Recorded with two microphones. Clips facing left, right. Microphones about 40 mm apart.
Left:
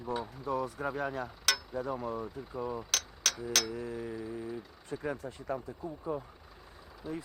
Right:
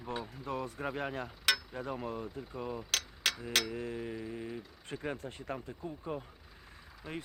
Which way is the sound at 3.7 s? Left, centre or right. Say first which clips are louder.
Left 1 dB; right.